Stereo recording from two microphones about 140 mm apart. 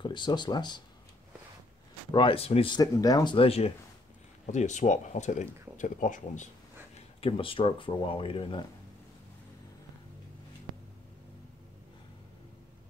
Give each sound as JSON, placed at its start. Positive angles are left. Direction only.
{"t": 0.0, "sound": "speech", "side_deg": 35}
{"t": 2.1, "sound": "speech", "side_deg": 40}
{"t": 3.3, "sound": "speech", "side_deg": 45}
{"t": 4.5, "sound": "speech", "side_deg": 60}
{"t": 7.2, "sound": "speech", "side_deg": 40}